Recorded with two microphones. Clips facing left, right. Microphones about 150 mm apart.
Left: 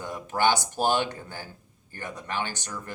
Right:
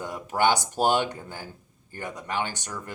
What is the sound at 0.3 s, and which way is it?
A man's voice, 15° right (ahead or behind).